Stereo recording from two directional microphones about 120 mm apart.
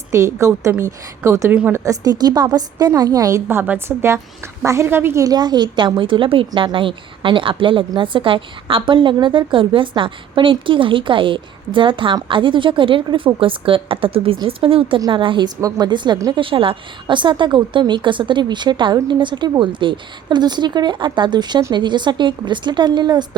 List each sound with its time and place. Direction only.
0.1 s a woman's voice: 25° right (ahead or behind)
1.8 s a woman's voice: 30° right (ahead or behind)
16.4 s a woman's voice: 50° right (ahead or behind)